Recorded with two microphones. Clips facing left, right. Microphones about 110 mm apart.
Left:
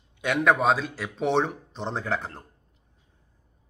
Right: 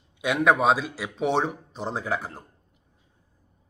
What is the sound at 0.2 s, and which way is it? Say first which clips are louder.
Speech: right 1 dB; 10° right (ahead or behind).